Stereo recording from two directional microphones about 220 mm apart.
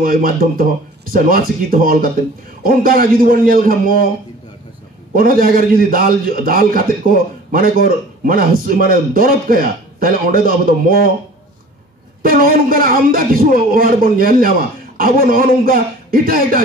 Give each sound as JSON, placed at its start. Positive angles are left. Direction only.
{"t": 0.0, "sound": "a man's voice", "side_deg": -40}
{"t": 5.1, "sound": "a man's voice", "side_deg": -40}
{"t": 12.2, "sound": "a man's voice", "side_deg": -40}